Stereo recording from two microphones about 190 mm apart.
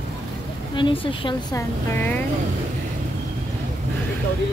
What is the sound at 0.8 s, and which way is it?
Speech, 25° left (ahead or behind).